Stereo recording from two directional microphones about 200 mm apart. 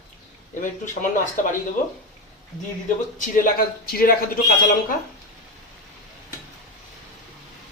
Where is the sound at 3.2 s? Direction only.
45° left (ahead or behind).